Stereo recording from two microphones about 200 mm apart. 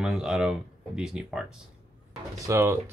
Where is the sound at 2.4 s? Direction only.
15° right (ahead or behind).